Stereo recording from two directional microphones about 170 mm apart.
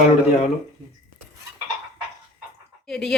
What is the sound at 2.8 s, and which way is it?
Speech, 5° left (ahead or behind).